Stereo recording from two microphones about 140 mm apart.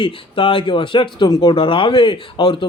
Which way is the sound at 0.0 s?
40° left (ahead or behind).